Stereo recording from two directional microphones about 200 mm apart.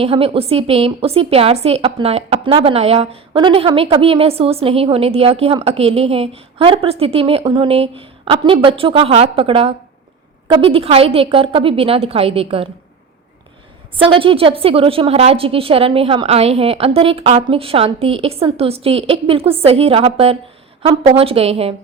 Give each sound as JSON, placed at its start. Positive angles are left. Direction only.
{"t": 0.0, "sound": "a woman's voice", "side_deg": -30}
{"t": 13.9, "sound": "a woman's voice", "side_deg": -25}